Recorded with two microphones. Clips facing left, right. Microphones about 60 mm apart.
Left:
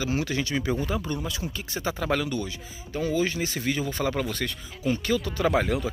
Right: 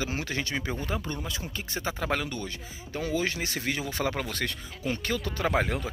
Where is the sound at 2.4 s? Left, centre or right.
Right.